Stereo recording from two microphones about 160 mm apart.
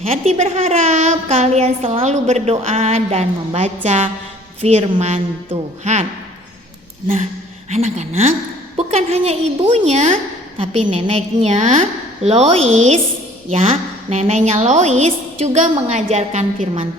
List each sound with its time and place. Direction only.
0.0 s a child's voice: 40° right (ahead or behind)
7.7 s a woman's voice: 45° right (ahead or behind)